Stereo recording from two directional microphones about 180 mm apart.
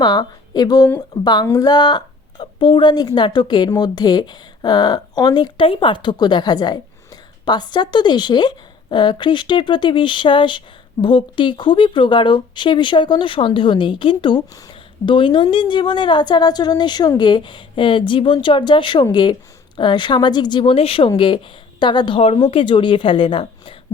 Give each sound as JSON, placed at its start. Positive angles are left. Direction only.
{"t": 0.0, "sound": "a woman's voice", "side_deg": 25}